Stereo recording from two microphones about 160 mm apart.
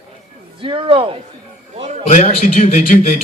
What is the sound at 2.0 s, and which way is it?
A man's voice, 50° left (ahead or behind).